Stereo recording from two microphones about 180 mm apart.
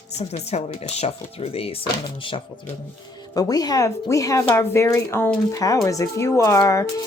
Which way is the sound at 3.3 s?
20° left (ahead or behind).